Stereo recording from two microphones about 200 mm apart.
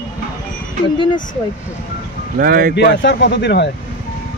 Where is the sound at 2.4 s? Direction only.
45° right (ahead or behind).